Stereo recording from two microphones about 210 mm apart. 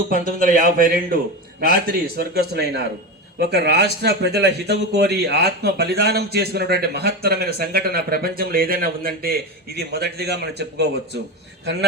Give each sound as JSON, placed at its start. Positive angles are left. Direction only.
{"t": 0.3, "sound": "a man's voice", "side_deg": -40}